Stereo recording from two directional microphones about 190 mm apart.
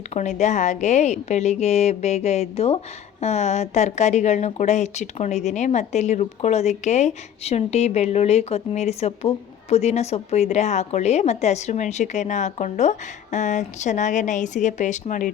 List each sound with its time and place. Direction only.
0.1 s speech: 40° left (ahead or behind)